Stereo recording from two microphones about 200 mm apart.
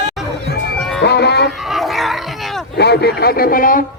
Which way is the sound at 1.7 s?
Centre (ahead or behind).